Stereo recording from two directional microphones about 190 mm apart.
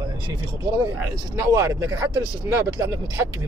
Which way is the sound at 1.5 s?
15° right (ahead or behind).